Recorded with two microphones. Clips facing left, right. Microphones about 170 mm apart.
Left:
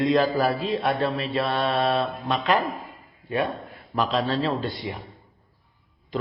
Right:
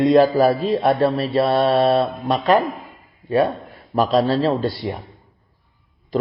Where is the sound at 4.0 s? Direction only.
40° right (ahead or behind).